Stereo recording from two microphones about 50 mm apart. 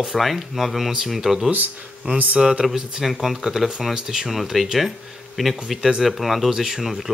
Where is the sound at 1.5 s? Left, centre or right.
Right.